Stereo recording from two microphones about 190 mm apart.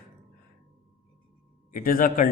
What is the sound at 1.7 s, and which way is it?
Speech, 45° left (ahead or behind).